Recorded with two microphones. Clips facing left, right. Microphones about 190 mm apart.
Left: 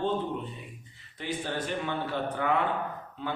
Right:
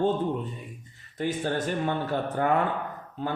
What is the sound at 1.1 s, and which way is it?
A man's voice, 45° right (ahead or behind).